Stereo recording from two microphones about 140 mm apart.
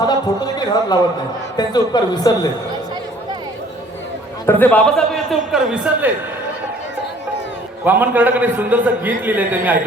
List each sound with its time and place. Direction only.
0.0 s a man's voice: 30° left (ahead or behind)
4.4 s a man's voice: 10° left (ahead or behind); by 6.1 s 5° right (ahead or behind)
7.9 s a man's voice: 15° right (ahead or behind)